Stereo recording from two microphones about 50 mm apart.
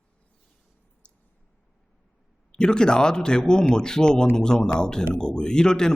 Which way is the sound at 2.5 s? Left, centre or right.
Centre.